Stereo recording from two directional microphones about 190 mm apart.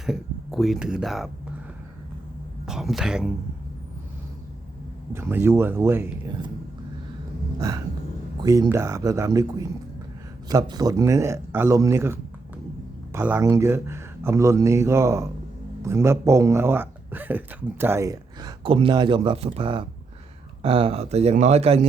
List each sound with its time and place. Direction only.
0.0 s speech: centre (ahead or behind)
2.6 s speech: centre (ahead or behind)
5.1 s speech: 10° right (ahead or behind)
8.4 s speech: 20° right (ahead or behind)